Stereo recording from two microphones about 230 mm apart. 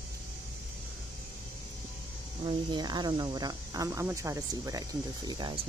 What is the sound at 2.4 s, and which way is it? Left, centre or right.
Speech, centre.